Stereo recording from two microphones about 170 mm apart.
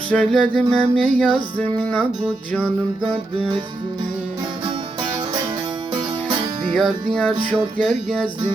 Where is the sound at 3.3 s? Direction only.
35° right (ahead or behind).